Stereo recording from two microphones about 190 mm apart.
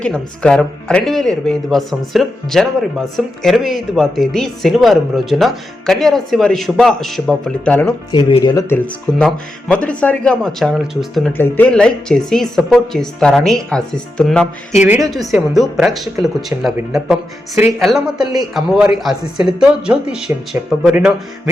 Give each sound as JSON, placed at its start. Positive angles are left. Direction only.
{"t": 0.0, "sound": "speech", "side_deg": 5}
{"t": 8.1, "sound": "speech", "side_deg": 25}
{"t": 8.7, "sound": "speech", "side_deg": 5}
{"t": 14.8, "sound": "a woman's voice", "side_deg": -15}
{"t": 15.1, "sound": "speech", "side_deg": 0}